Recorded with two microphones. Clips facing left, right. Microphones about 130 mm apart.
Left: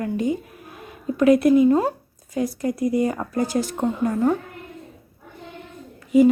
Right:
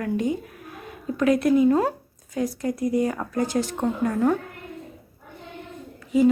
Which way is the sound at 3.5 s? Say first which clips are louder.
Left 1 dB; 5° left (ahead or behind).